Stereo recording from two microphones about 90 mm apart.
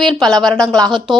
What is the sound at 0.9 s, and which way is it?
Speech, 60° right (ahead or behind).